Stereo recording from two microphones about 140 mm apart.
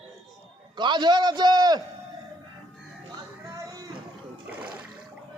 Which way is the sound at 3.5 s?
25° right (ahead or behind).